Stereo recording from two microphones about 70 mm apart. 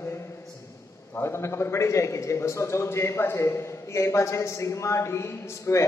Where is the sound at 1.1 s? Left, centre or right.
Left.